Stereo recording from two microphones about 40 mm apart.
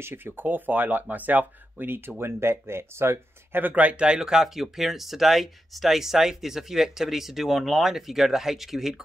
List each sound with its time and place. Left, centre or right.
0.0 s speech: right
3.9 s speech: right
4.2 s speech: centre